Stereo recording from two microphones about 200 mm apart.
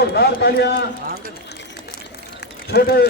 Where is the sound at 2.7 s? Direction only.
55° left (ahead or behind).